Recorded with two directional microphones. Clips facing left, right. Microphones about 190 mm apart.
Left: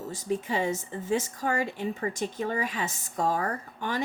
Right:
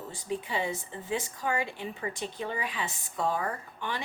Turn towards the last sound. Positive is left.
turn(degrees=45)  # may be behind; listen again after turning